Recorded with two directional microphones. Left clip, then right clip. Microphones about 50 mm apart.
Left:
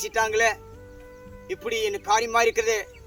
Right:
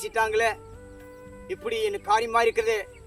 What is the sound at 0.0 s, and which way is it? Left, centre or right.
Speech, right.